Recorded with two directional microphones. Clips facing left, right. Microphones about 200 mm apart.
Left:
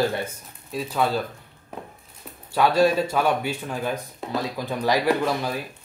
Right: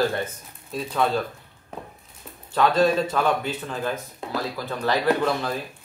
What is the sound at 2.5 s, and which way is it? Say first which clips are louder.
Speech: left 1 dB; 10° left (ahead or behind).